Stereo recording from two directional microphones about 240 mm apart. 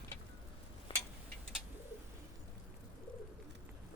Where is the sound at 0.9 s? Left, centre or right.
Left.